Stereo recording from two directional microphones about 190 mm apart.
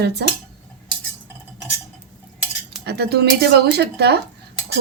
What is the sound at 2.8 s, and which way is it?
Speech, 60° right (ahead or behind).